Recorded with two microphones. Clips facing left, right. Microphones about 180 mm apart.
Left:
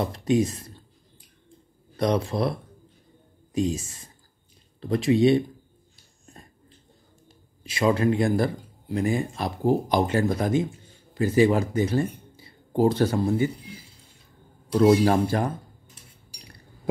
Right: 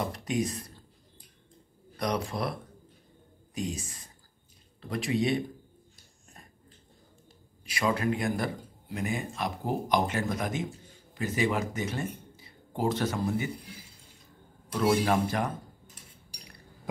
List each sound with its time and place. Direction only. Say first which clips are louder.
0.1 s speech: left 8 dB; 25° left (ahead or behind)
2.0 s speech: left 7 dB; 25° left (ahead or behind)
3.5 s speech: left 9 dB; 25° left (ahead or behind)
7.6 s speech: left 6 dB; 25° left (ahead or behind)
14.7 s speech: left 7 dB; 35° left (ahead or behind)